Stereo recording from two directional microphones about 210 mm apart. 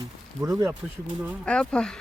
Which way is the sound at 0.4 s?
15° right (ahead or behind).